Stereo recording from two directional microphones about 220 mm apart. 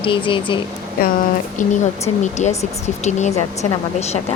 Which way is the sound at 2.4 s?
30° left (ahead or behind).